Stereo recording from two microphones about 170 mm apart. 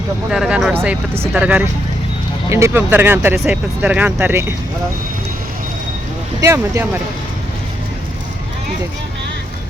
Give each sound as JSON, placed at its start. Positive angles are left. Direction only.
{"t": 0.3, "sound": "speech", "side_deg": -5}
{"t": 6.4, "sound": "speech", "side_deg": -15}